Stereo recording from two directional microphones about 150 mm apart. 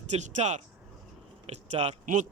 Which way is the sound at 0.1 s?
50° right (ahead or behind).